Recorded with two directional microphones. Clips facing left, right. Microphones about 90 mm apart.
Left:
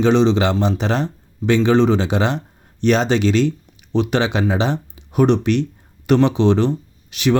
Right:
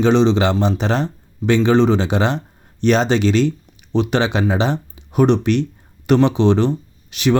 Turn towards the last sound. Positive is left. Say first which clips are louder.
# right 1 dB
turn(degrees=-30)  # may be behind; listen again after turning